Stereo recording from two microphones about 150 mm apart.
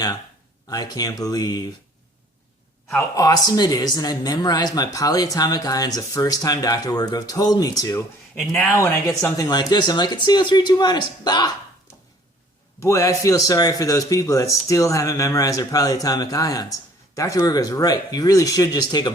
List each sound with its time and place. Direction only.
0.7 s speech: 25° left (ahead or behind)
3.2 s speech: 25° left (ahead or behind)
8.4 s speech: 5° left (ahead or behind)
9.4 s speech: 30° left (ahead or behind)
12.8 s speech: 20° left (ahead or behind)